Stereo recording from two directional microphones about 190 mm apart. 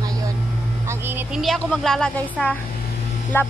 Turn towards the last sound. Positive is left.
turn(degrees=10)  # may be behind; listen again after turning